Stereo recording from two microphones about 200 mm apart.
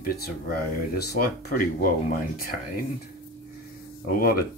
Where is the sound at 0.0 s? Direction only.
50° left (ahead or behind).